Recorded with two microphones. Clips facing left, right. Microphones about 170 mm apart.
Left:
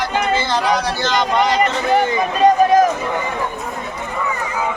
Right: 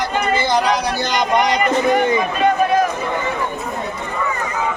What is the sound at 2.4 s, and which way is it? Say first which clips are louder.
Run: left 6 dB; 40° left (ahead or behind).